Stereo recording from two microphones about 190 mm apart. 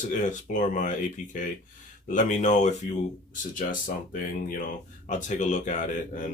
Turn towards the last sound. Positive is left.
turn(degrees=40)  # may be behind; listen again after turning